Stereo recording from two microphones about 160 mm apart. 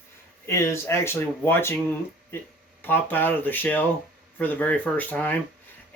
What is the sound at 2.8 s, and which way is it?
Speech, 10° left (ahead or behind).